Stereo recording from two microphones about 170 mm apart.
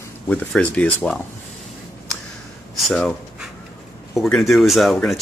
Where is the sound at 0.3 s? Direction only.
5° left (ahead or behind).